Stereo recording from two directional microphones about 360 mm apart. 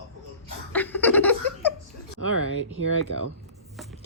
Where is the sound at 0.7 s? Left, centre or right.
Centre.